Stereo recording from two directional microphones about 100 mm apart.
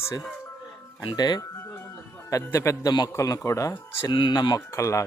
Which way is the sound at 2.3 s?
30° left (ahead or behind).